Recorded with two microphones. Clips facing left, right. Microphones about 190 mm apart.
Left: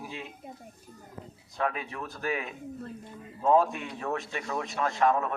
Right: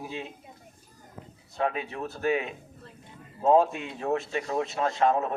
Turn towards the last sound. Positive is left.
turn(degrees=-25)  # may be behind; listen again after turning